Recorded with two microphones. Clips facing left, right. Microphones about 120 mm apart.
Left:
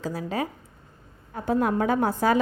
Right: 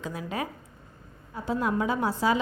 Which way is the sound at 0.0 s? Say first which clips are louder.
Left 4 dB; 35° left (ahead or behind).